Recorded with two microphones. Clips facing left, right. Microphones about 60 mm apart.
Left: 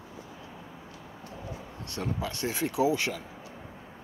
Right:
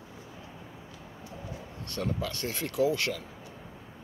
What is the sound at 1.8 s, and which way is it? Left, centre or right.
Speech, centre.